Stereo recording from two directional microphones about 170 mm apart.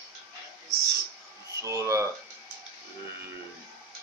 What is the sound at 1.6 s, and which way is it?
Speech, 20° right (ahead or behind).